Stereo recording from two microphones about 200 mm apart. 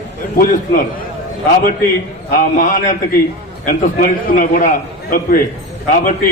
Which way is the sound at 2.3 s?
40° left (ahead or behind).